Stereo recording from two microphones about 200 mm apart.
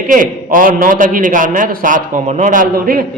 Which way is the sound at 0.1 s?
45° right (ahead or behind).